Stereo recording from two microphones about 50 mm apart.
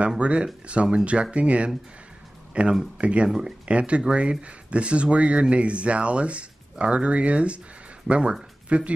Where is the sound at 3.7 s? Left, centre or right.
Right.